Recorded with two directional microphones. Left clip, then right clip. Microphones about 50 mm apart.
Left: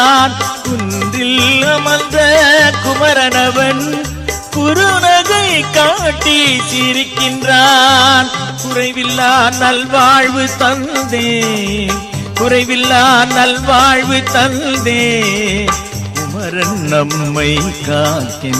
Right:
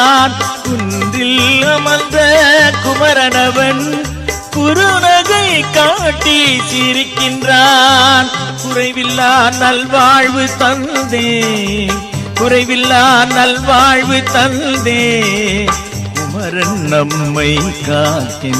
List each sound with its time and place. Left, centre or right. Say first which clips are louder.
0.0 s music: even; right